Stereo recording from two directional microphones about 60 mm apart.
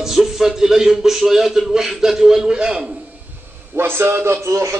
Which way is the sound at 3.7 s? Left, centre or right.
Right.